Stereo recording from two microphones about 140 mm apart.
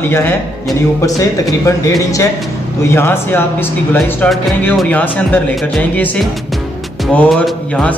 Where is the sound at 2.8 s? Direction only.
15° left (ahead or behind).